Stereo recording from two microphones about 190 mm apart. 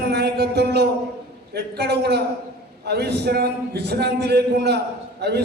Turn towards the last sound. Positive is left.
turn(degrees=-60)  # may be behind; listen again after turning